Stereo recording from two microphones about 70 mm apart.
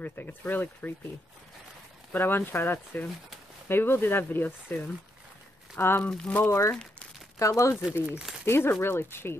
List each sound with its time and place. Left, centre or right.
0.0 s speech: left
2.1 s speech: left
5.8 s speech: left
6.0 s speech: centre
6.4 s speech: left
8.5 s speech: left